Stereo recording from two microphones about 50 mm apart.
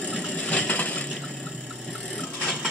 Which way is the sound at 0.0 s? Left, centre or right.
Left.